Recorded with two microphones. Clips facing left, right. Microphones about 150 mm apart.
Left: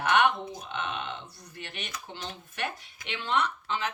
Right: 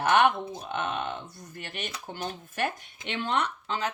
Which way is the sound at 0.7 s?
45° right (ahead or behind).